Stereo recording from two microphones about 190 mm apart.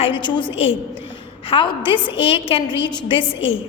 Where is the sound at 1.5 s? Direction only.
25° left (ahead or behind).